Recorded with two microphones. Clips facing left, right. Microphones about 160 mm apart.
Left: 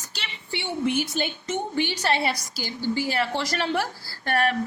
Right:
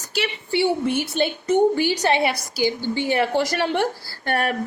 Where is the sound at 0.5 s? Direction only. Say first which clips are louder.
Right 5 dB; 30° right (ahead or behind).